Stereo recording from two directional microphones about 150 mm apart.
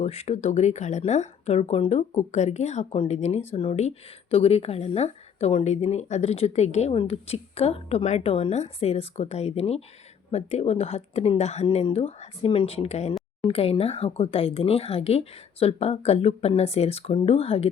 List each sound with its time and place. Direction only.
0.0 s speech: 45° left (ahead or behind)